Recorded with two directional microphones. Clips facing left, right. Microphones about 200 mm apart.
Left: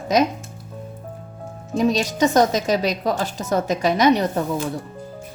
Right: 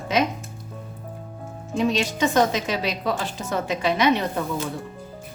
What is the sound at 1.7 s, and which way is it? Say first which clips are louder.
A woman's voice: left 3 dB; 40° left (ahead or behind).